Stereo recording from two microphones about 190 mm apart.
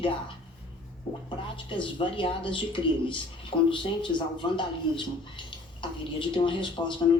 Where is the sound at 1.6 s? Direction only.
25° left (ahead or behind).